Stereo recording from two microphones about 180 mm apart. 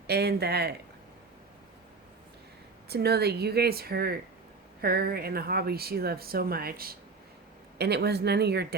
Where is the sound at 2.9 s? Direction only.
60° right (ahead or behind).